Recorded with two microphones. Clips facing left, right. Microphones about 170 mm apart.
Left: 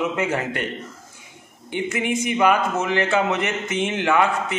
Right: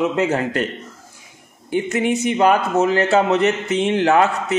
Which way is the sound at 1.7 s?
40° right (ahead or behind).